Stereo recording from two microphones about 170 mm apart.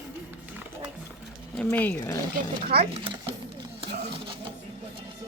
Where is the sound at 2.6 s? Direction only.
65° right (ahead or behind).